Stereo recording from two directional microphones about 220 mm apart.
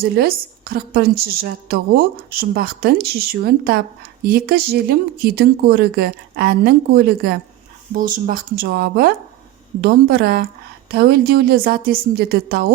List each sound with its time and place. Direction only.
0.0 s speech: 45° right (ahead or behind)